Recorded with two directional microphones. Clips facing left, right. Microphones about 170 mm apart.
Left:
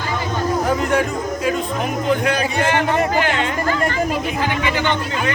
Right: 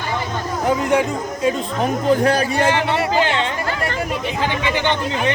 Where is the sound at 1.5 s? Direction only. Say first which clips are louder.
Right 4 dB; 35° right (ahead or behind).